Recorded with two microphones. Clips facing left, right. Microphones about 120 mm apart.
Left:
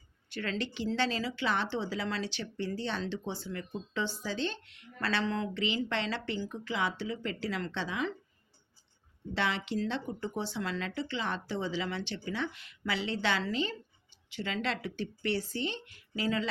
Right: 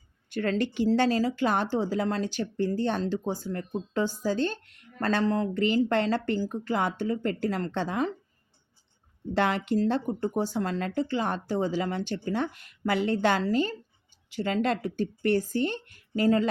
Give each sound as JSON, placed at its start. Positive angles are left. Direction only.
{"t": 0.3, "sound": "speech", "side_deg": -45}
{"t": 9.3, "sound": "speech", "side_deg": -45}